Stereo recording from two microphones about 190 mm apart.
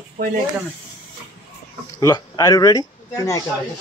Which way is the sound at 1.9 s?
20° left (ahead or behind).